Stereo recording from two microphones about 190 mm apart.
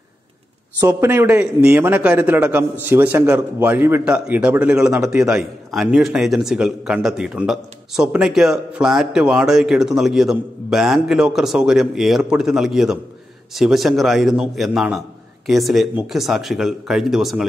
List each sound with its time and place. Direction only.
0.7 s a man's voice: 10° right (ahead or behind)